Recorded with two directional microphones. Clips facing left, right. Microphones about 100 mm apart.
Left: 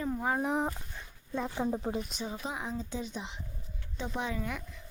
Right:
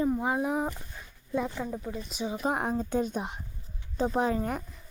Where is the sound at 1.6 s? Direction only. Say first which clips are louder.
Left 3 dB; 30° left (ahead or behind).